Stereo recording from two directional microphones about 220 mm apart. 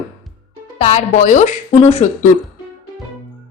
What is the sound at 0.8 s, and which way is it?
A woman's voice, 30° left (ahead or behind).